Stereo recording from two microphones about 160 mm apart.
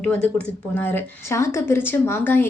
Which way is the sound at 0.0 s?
5° left (ahead or behind).